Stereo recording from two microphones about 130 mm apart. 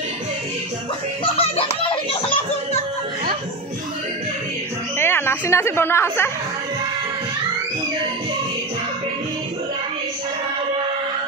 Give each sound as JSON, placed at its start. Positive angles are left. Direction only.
{"t": 1.2, "sound": "music", "side_deg": 45}
{"t": 4.9, "sound": "speech", "side_deg": 15}